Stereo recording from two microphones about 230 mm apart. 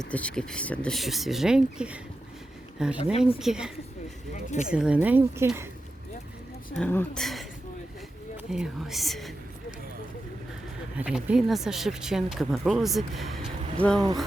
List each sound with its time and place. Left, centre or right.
0.0 s speech: centre
3.0 s speech: left
3.3 s speech: centre
4.7 s speech: centre
6.7 s speech: centre
10.9 s speech: centre